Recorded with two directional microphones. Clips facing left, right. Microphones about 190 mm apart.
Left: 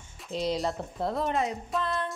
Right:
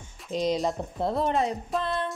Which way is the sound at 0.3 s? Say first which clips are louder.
Right 3 dB; 15° right (ahead or behind).